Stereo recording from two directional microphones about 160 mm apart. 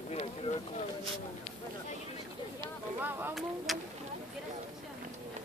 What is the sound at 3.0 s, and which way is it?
Speech, 15° right (ahead or behind).